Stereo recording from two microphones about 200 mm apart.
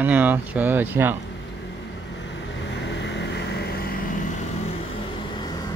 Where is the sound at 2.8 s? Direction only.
60° left (ahead or behind).